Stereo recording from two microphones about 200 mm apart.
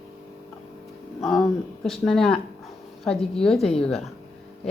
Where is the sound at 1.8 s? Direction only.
Centre (ahead or behind).